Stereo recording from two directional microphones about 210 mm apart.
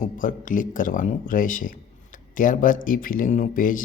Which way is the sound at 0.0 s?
40° left (ahead or behind).